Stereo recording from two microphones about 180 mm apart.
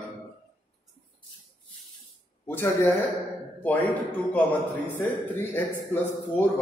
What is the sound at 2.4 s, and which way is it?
A man's voice, 15° left (ahead or behind).